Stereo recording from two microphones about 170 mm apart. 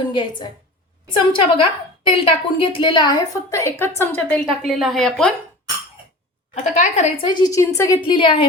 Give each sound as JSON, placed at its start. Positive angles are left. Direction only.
{"t": 0.0, "sound": "a woman's voice", "side_deg": 25}
{"t": 6.5, "sound": "a woman's voice", "side_deg": 45}
{"t": 7.3, "sound": "a woman's voice", "side_deg": 25}
{"t": 8.0, "sound": "a woman's voice", "side_deg": 30}